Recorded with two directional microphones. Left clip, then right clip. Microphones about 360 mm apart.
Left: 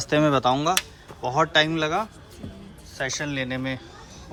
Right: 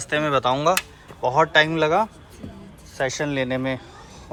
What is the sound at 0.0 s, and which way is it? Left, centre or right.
Speech, centre.